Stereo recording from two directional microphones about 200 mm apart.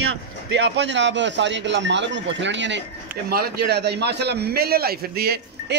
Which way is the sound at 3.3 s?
50° right (ahead or behind).